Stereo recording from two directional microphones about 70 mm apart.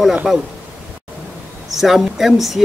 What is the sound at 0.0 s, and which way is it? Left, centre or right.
Speech, centre.